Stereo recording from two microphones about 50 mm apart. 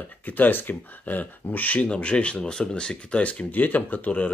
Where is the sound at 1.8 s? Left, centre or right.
Left.